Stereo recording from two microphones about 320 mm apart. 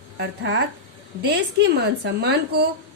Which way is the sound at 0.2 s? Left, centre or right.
Right.